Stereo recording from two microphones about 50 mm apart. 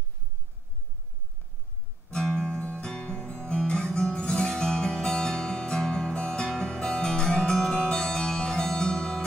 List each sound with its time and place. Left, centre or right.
2.0 s guitar: left
6.4 s music: centre